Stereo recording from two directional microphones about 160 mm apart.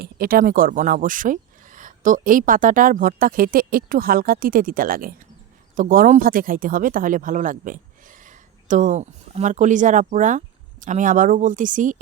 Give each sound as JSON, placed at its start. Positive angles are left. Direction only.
{"t": 0.0, "sound": "speech", "side_deg": -65}